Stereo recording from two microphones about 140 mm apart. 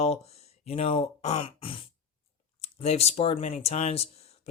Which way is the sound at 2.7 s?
50° left (ahead or behind).